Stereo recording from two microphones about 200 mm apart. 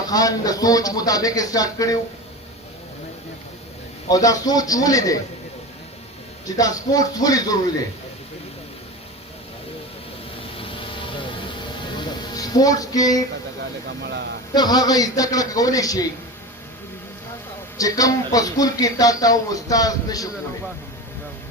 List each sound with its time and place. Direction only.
0.1 s speech: 20° left (ahead or behind)
4.1 s speech: 15° left (ahead or behind)
6.6 s speech: 20° left (ahead or behind)
11.9 s a sound: 20° left (ahead or behind)
14.0 s speech: 60° right (ahead or behind)
14.5 s speech: 20° left (ahead or behind)
17.7 s speech: 15° left (ahead or behind)